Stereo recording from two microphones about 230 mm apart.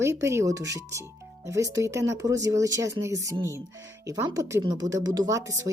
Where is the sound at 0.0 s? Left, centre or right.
Centre.